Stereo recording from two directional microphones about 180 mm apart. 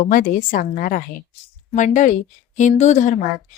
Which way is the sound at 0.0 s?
50° left (ahead or behind).